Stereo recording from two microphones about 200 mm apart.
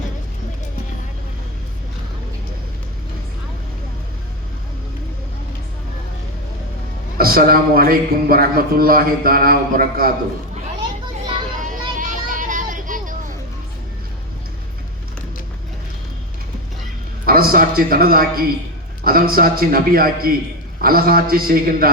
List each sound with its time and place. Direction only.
7.2 s speech: 50° right (ahead or behind)
11.6 s vehicle: 40° right (ahead or behind)
17.2 s speech: 45° right (ahead or behind)